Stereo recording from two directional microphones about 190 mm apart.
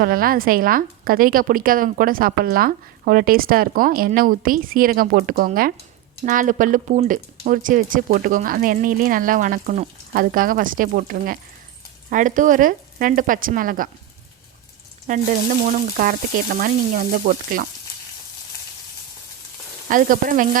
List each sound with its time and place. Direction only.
0.0 s a woman's voice: 50° right (ahead or behind)
15.0 s a woman's voice: 40° right (ahead or behind)
19.9 s a woman's voice: 45° right (ahead or behind)